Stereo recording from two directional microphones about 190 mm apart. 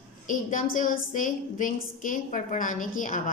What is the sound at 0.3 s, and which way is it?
A woman's voice, 45° left (ahead or behind).